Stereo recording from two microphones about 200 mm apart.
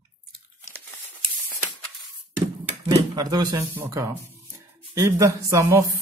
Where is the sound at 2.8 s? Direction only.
20° right (ahead or behind).